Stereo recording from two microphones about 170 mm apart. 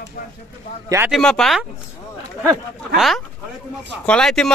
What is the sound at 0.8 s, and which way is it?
Speech, 15° right (ahead or behind).